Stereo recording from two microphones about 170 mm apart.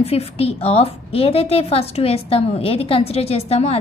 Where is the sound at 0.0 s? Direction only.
35° left (ahead or behind).